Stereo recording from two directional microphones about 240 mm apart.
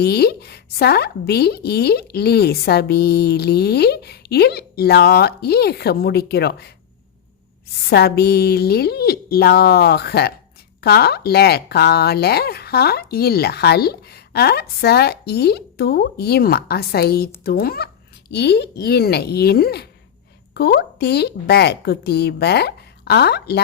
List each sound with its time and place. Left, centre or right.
0.0 s a woman's voice: left
7.9 s a woman's voice: left